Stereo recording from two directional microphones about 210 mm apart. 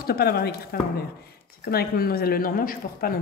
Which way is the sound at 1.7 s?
45° left (ahead or behind).